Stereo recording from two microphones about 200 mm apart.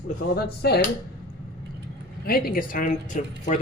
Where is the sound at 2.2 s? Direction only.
50° left (ahead or behind).